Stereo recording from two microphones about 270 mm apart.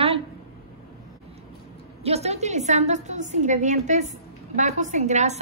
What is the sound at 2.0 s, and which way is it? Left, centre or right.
A woman's voice, right.